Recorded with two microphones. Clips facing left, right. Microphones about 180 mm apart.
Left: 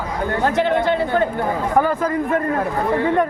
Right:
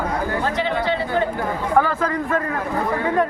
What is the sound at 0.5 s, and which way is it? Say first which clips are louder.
Speech: left 4 dB; 50° left (ahead or behind).